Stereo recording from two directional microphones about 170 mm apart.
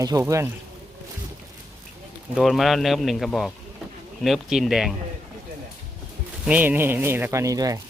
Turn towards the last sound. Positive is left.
turn(degrees=-20)  # may be behind; listen again after turning